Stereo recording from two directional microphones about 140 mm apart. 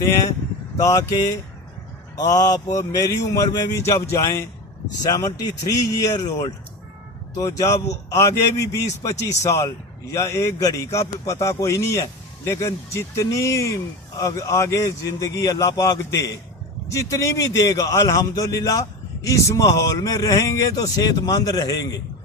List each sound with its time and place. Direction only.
0.8 s speech: 20° left (ahead or behind)